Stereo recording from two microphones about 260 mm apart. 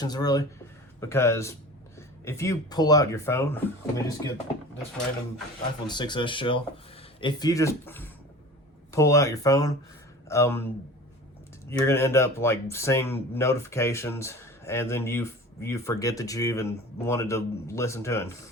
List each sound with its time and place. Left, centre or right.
0.0 s speech: centre
5.9 s speech: centre
11.7 s speech: centre